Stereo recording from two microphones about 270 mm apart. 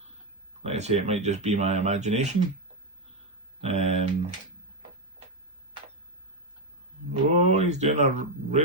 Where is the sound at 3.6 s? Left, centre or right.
Right.